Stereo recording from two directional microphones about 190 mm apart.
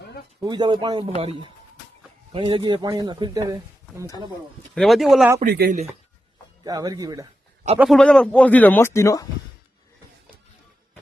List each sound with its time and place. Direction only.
0.3 s speech: 20° right (ahead or behind)
4.7 s speech: centre (ahead or behind)
5.4 s speech: 50° right (ahead or behind)
6.7 s speech: 20° right (ahead or behind)
7.8 s speech: centre (ahead or behind)